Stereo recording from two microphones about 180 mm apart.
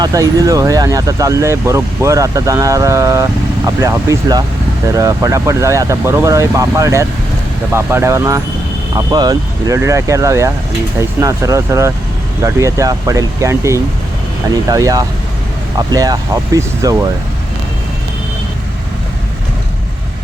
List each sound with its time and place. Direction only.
0.0 s speech: 20° right (ahead or behind)